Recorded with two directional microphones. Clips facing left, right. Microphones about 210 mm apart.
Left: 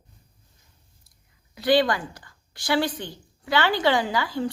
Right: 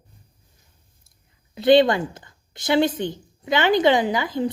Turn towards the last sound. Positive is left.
turn(degrees=-20)  # may be behind; listen again after turning